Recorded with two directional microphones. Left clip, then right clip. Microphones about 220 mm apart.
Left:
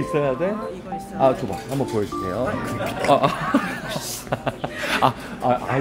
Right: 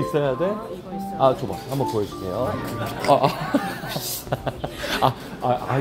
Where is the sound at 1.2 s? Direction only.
Centre (ahead or behind).